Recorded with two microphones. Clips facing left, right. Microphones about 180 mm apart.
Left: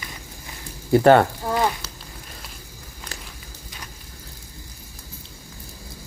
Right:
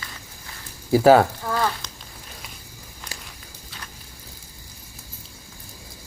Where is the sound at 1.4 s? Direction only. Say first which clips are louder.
Left 2 dB; 20° left (ahead or behind).